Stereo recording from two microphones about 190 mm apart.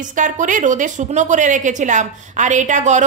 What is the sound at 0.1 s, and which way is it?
A woman's voice, 40° right (ahead or behind).